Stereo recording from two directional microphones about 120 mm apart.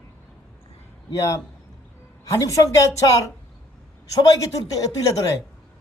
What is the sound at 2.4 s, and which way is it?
Speech, 25° left (ahead or behind).